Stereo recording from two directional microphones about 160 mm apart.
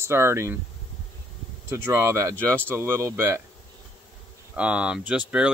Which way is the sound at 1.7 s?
20° right (ahead or behind).